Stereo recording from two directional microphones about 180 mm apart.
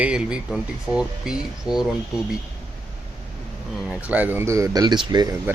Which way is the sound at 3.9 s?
10° right (ahead or behind).